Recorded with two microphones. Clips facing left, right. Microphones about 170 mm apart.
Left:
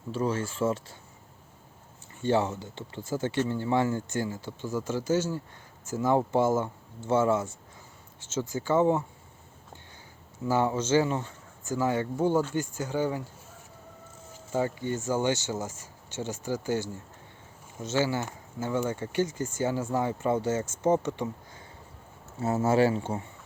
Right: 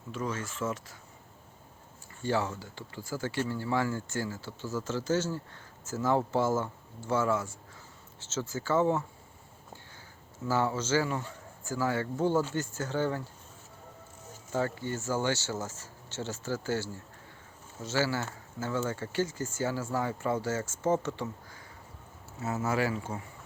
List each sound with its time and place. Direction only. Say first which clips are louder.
0.1 s speech: left 6 dB; 30° left (ahead or behind)
2.2 s speech: left 5 dB; 20° left (ahead or behind)
10.4 s speech: left 3 dB; 20° left (ahead or behind)
14.5 s speech: left 3 dB; 15° left (ahead or behind)
22.4 s speech: left 7 dB; 30° left (ahead or behind)